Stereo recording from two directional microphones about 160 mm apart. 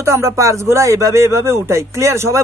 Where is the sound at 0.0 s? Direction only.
20° right (ahead or behind).